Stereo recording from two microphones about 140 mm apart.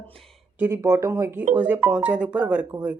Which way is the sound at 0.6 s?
20° right (ahead or behind).